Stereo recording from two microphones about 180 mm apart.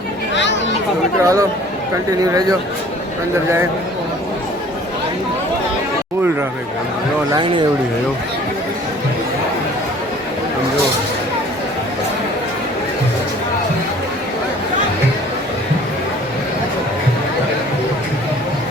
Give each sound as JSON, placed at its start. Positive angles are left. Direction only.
{"t": 0.3, "sound": "children playing", "side_deg": 85}
{"t": 1.2, "sound": "speech", "side_deg": -20}